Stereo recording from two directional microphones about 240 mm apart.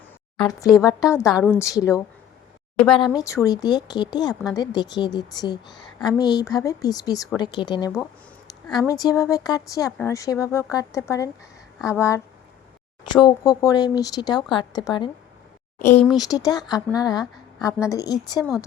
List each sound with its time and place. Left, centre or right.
0.3 s a woman's voice: centre
8.9 s a woman's voice: centre
16.1 s speech: centre